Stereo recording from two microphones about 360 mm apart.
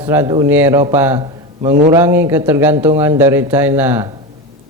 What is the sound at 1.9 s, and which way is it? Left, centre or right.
A man's voice, centre.